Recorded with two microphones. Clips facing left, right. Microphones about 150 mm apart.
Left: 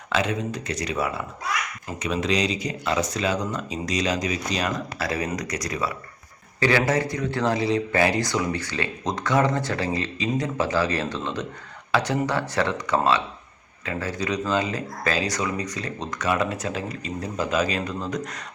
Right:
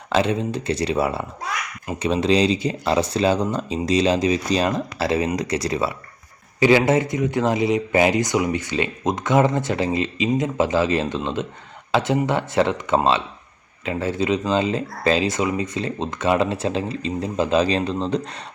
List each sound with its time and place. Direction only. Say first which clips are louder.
0.1 s speech: right 5 dB; 30° right (ahead or behind)